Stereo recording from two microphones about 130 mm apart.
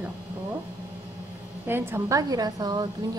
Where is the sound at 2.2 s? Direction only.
30° right (ahead or behind).